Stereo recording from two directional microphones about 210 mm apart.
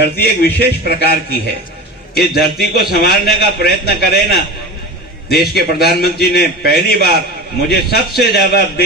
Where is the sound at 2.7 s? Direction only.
50° left (ahead or behind).